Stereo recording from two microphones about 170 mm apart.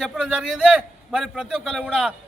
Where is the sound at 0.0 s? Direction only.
5° right (ahead or behind).